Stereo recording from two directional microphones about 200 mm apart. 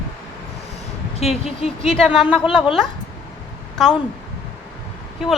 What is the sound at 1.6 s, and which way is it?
Speech, 30° left (ahead or behind).